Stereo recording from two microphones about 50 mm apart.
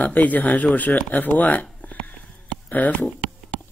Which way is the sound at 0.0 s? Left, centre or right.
Left.